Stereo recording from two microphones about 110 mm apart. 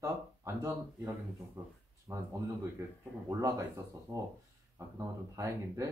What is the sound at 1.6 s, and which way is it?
A man's voice, 25° right (ahead or behind).